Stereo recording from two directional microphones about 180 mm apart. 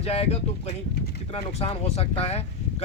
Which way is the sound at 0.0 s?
35° left (ahead or behind).